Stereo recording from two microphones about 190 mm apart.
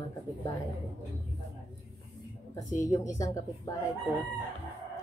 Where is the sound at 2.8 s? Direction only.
15° left (ahead or behind).